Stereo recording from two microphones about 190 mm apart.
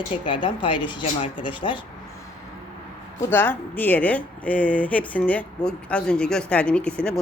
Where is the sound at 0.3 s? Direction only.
25° left (ahead or behind).